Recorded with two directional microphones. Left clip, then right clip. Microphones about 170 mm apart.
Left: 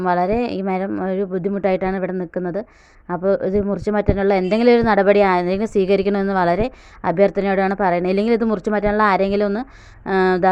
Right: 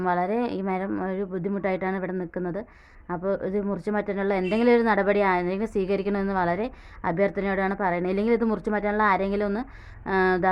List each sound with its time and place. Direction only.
0.0 s a woman's voice: 30° left (ahead or behind)